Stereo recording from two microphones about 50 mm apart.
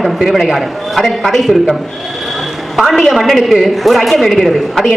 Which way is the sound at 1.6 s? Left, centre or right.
Centre.